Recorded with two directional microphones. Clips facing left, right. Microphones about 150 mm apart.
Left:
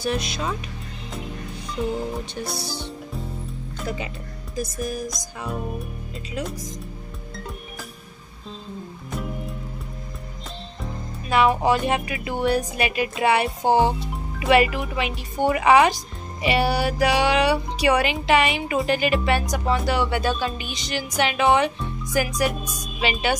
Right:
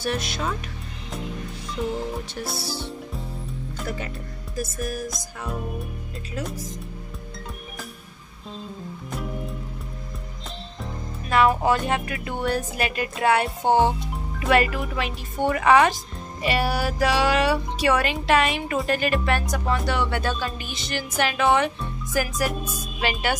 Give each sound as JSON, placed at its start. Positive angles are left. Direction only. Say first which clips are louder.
{"t": 0.1, "sound": "speech", "louder": "left 1 dB", "side_deg": 0}
{"t": 2.2, "sound": "speech", "louder": "left 1 dB", "side_deg": -5}
{"t": 11.2, "sound": "speech", "louder": "left 1 dB", "side_deg": 5}